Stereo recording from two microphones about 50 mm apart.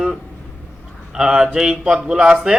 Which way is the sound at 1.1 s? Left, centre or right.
Centre.